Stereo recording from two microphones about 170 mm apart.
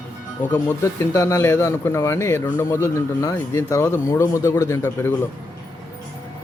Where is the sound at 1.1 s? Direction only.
15° left (ahead or behind).